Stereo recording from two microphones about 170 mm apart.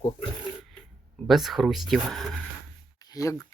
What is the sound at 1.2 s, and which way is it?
Speech, centre (ahead or behind).